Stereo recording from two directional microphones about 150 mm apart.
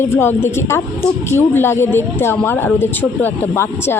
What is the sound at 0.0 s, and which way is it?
A woman's voice, 15° left (ahead or behind).